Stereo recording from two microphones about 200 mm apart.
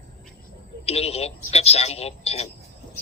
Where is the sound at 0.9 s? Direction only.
30° left (ahead or behind).